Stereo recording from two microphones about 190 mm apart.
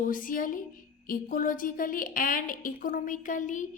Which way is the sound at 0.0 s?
45° left (ahead or behind).